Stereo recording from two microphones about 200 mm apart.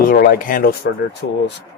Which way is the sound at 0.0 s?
45° left (ahead or behind).